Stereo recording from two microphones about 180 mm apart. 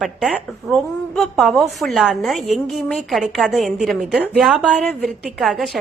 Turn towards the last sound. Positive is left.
turn(degrees=0)  # may be behind; listen again after turning